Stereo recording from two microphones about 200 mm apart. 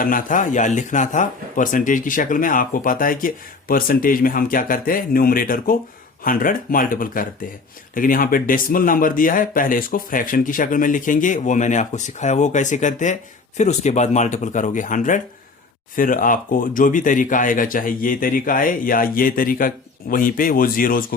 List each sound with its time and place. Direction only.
0.0 s speech: 40° left (ahead or behind)